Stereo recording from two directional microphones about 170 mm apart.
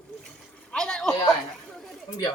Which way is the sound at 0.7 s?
5° left (ahead or behind).